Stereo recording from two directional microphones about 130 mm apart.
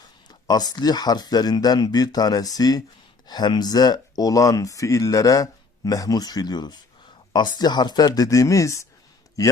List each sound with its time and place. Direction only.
0.3 s speech: 30° left (ahead or behind)